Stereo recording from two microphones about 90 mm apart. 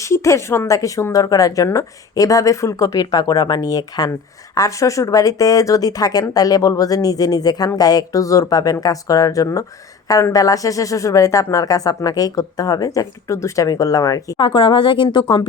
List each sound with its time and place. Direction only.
0.0 s speech: 35° left (ahead or behind)
14.3 s a woman's voice: 65° left (ahead or behind)